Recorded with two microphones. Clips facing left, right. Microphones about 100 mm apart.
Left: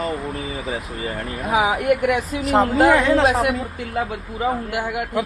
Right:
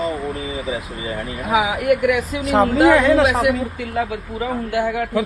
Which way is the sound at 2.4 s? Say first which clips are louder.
Right 2 dB; centre (ahead or behind).